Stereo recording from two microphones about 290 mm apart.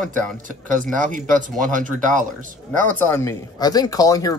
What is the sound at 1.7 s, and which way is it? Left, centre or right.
Speech, right.